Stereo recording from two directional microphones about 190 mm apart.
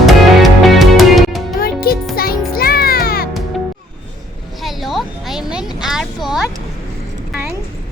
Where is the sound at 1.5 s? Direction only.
50° left (ahead or behind).